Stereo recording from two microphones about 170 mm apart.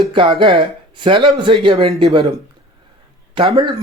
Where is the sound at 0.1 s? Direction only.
30° right (ahead or behind).